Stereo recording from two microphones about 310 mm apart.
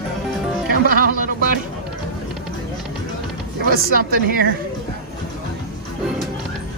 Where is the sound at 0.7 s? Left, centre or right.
Right.